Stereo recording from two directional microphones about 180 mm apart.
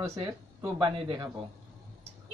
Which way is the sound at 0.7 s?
30° right (ahead or behind).